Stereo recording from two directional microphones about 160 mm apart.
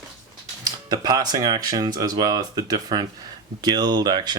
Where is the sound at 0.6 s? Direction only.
25° right (ahead or behind).